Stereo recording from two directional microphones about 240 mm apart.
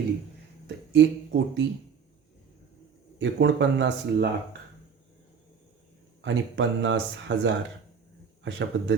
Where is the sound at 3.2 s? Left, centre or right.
Right.